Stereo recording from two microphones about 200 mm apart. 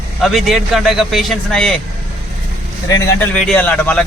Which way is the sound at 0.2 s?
Centre (ahead or behind).